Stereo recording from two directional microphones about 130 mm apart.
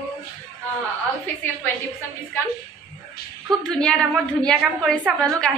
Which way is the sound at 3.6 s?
5° left (ahead or behind).